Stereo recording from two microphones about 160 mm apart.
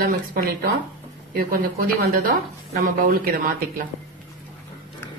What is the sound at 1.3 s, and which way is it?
Speech, 65° right (ahead or behind).